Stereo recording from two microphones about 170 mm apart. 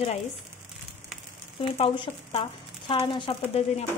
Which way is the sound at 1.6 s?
30° left (ahead or behind).